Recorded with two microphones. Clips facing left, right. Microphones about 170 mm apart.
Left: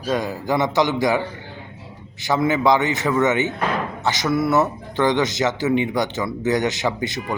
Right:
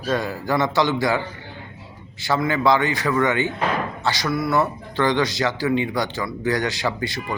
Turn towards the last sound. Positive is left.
turn(degrees=20)  # may be behind; listen again after turning